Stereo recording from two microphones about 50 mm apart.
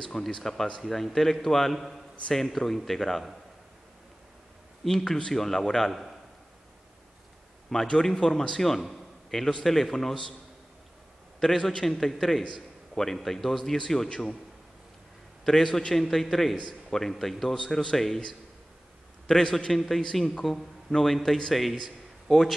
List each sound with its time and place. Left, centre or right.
0.0 s a man's voice: centre
4.8 s a man's voice: centre
7.8 s a man's voice: centre
11.3 s a man's voice: centre
15.4 s a man's voice: centre
19.2 s a man's voice: centre